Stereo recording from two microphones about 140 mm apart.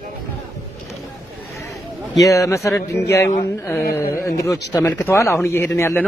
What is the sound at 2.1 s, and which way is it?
Speech, 25° left (ahead or behind).